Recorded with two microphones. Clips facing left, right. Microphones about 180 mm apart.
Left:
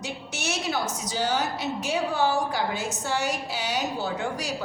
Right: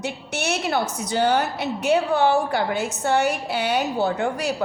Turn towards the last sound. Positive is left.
turn(degrees=-60)  # may be behind; listen again after turning